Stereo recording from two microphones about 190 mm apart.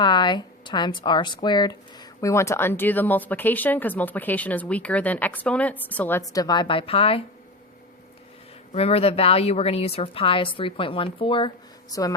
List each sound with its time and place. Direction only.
0.0 s a woman's voice: 25° left (ahead or behind)
8.7 s a woman's voice: 30° left (ahead or behind)